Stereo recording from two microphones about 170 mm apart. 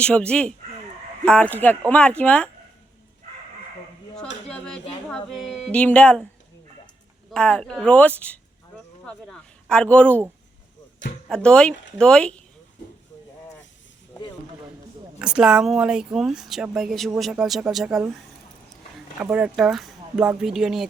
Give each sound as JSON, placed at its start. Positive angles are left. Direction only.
{"t": 0.0, "sound": "a woman's voice", "side_deg": 5}
{"t": 4.4, "sound": "a sound", "side_deg": 5}
{"t": 5.1, "sound": "speech", "side_deg": 5}
{"t": 7.3, "sound": "a woman's voice", "side_deg": 5}
{"t": 11.3, "sound": "speech", "side_deg": 5}
{"t": 15.2, "sound": "speech", "side_deg": -5}
{"t": 19.2, "sound": "speech", "side_deg": -5}